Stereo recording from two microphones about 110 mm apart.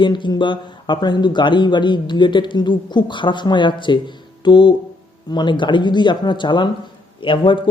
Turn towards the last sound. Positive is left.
turn(degrees=50)  # may be behind; listen again after turning